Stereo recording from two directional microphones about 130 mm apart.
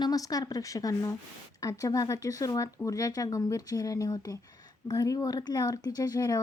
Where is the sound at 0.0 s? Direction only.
30° left (ahead or behind).